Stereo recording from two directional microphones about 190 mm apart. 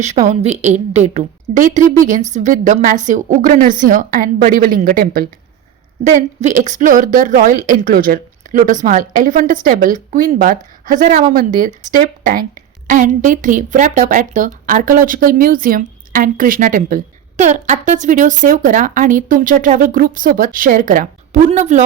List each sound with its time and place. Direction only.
0.3 s a woman's voice: 35° right (ahead or behind)
6.4 s a woman's voice: 40° right (ahead or behind)